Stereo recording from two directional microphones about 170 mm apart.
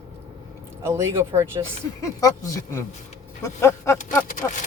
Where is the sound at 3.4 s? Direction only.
15° left (ahead or behind).